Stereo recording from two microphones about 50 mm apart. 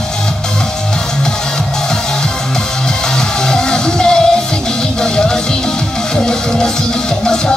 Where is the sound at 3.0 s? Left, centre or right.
Centre.